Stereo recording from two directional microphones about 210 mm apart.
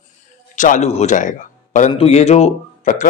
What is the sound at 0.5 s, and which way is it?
A man's voice, 35° left (ahead or behind).